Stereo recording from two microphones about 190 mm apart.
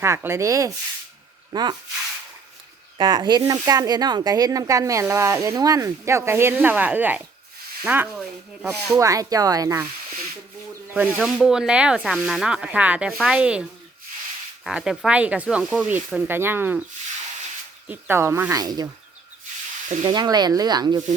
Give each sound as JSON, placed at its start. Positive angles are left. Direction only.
{"t": 0.0, "sound": "speech", "side_deg": -15}
{"t": 3.0, "sound": "speech", "side_deg": -25}
{"t": 9.0, "sound": "speech", "side_deg": -15}
{"t": 10.8, "sound": "speech", "side_deg": -10}
{"t": 17.8, "sound": "speech", "side_deg": -10}
{"t": 20.1, "sound": "speech", "side_deg": -20}